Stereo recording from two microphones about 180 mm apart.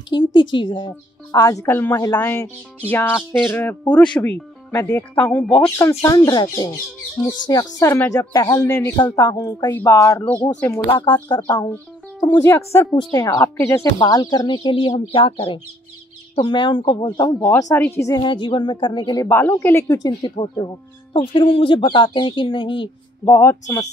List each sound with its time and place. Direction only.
0.1 s speech: 25° left (ahead or behind); by 10.4 s 10° left (ahead or behind)
10.9 s speech: 25° left (ahead or behind)
18.2 s speech: 25° left (ahead or behind)
19.2 s speech: 10° left (ahead or behind); by 23.3 s 25° left (ahead or behind)
23.3 s speech: 15° left (ahead or behind)